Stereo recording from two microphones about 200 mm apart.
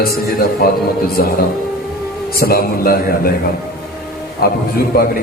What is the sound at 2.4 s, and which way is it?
Speech, 50° left (ahead or behind).